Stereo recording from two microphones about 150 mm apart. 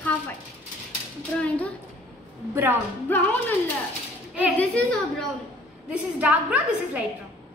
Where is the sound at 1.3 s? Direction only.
10° left (ahead or behind).